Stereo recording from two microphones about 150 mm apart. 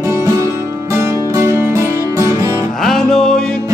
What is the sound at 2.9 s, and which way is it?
Music, 5° left (ahead or behind).